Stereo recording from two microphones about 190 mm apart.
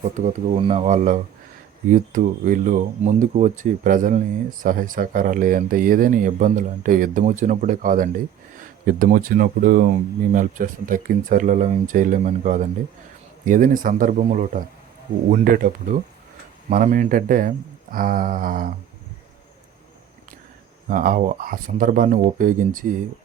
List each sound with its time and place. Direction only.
0.0 s speech: 35° right (ahead or behind)
20.8 s speech: 45° right (ahead or behind)